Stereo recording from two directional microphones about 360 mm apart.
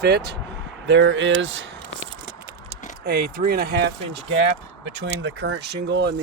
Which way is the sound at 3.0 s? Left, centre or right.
Right.